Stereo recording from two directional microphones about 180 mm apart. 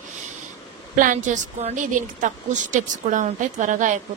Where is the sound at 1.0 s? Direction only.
45° right (ahead or behind).